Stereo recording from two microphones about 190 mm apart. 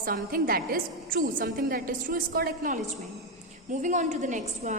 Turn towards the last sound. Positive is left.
turn(degrees=-40)  # may be behind; listen again after turning